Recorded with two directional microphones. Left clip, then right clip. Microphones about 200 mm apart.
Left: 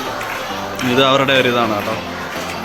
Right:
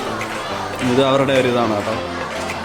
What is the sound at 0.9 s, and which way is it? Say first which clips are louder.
Speech: left 2 dB; 10° right (ahead or behind).